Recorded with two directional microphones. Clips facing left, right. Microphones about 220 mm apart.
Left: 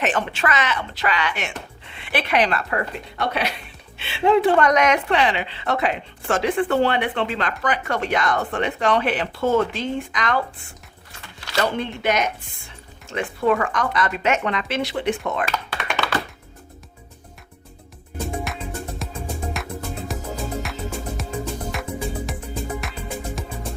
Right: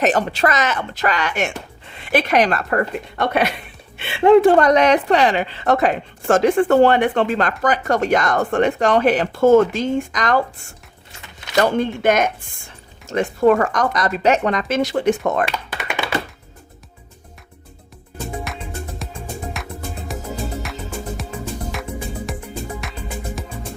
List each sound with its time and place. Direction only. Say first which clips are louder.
0.0 s a woman's voice: right 5 dB; 40° right (ahead or behind)
11.3 s a sound: right 6 dB; 20° right (ahead or behind)
11.6 s a woman's voice: right 6 dB; 45° right (ahead or behind)
15.8 s computer keyboard: right 1 dB; 5° right (ahead or behind)
18.5 s music: even; centre (ahead or behind)
21.7 s music: even; centre (ahead or behind)